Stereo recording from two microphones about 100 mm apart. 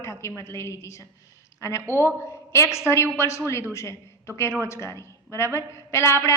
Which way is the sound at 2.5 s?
30° left (ahead or behind).